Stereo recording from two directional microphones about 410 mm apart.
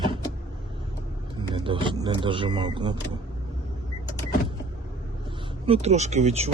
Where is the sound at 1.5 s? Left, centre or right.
Centre.